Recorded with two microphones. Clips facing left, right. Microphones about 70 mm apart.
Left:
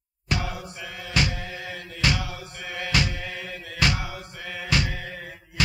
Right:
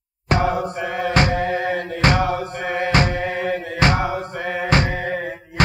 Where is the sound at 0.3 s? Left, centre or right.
Right.